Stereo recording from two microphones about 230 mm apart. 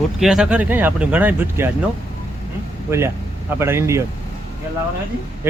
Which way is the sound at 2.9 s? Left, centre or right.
Centre.